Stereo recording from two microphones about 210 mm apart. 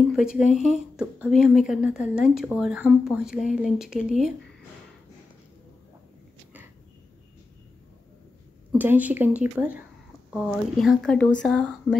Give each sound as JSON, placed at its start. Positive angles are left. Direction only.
{"t": 0.1, "sound": "speech", "side_deg": -5}
{"t": 0.4, "sound": "speech", "side_deg": 35}
{"t": 0.9, "sound": "a woman's voice", "side_deg": -5}
{"t": 8.7, "sound": "a woman's voice", "side_deg": -10}